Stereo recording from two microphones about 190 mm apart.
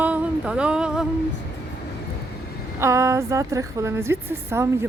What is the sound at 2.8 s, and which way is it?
A woman's voice, 15° right (ahead or behind).